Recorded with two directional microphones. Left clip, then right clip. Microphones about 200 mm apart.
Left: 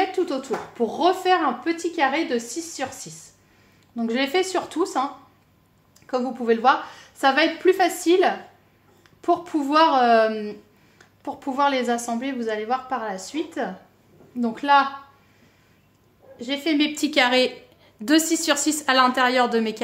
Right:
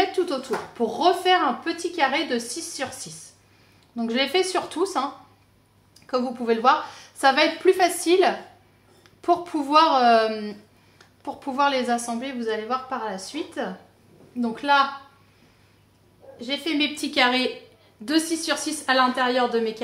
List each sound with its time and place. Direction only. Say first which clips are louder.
0.0 s a woman's voice: even; 20° left (ahead or behind); by 14.8 s 35° left (ahead or behind)
16.3 s a woman's voice: left 2 dB; 35° left (ahead or behind); by 19.8 s 60° left (ahead or behind)